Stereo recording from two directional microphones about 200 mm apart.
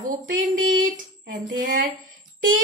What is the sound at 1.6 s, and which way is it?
Speech, 45° right (ahead or behind).